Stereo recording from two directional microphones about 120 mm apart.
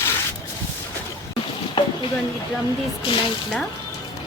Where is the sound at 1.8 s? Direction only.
45° left (ahead or behind).